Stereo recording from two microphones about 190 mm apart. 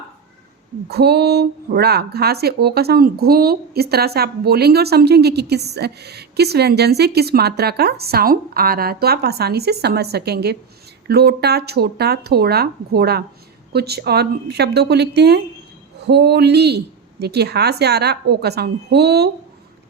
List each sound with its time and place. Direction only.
0.9 s speech: 60° right (ahead or behind)